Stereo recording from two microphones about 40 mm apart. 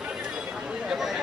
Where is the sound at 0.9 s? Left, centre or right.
Centre.